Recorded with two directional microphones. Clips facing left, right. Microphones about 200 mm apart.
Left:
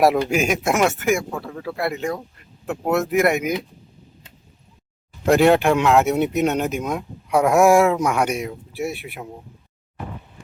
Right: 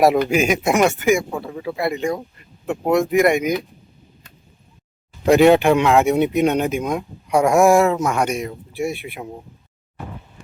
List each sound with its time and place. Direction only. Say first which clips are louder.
0.3 s speech: right 2 dB; centre (ahead or behind)
5.2 s speech: right 3 dB; centre (ahead or behind)